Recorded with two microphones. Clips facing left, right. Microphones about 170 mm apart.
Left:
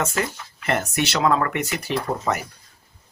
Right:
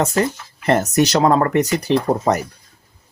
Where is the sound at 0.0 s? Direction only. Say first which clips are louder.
Right 7 dB; 35° right (ahead or behind).